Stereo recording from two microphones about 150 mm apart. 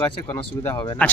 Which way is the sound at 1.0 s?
10° left (ahead or behind).